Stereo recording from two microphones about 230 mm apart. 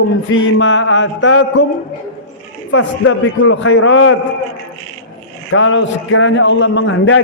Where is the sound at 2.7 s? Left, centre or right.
Left.